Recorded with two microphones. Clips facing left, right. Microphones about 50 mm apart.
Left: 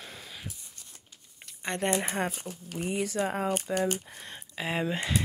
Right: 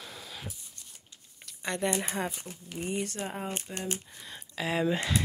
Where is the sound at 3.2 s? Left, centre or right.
Left.